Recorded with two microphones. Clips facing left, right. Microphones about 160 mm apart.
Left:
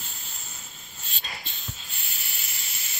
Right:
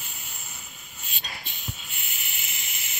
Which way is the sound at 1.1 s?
15° right (ahead or behind).